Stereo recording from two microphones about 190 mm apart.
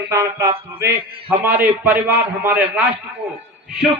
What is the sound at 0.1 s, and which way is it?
A man's voice, 15° right (ahead or behind).